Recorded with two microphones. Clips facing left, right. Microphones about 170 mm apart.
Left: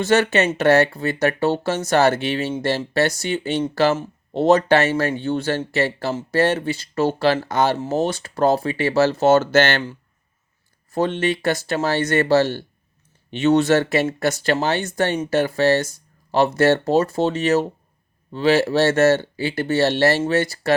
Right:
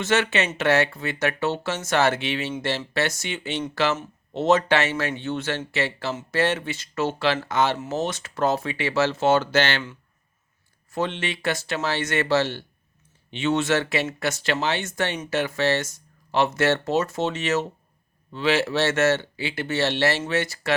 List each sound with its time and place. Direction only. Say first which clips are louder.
0.0 s speech: left 5 dB; 40° left (ahead or behind)